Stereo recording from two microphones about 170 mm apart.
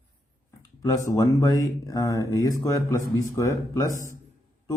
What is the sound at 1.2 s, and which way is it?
A man's voice, 20° left (ahead or behind).